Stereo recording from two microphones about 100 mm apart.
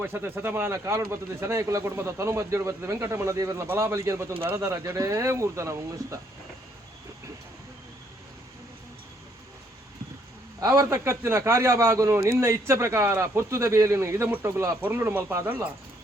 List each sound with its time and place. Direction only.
0.0 s speech: 20° right (ahead or behind)
10.6 s speech: 35° right (ahead or behind)
14.8 s speech: 20° right (ahead or behind)